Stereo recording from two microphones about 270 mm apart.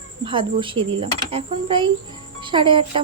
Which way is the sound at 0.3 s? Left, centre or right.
Centre.